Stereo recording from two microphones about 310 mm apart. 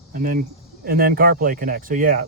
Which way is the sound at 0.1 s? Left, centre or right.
Right.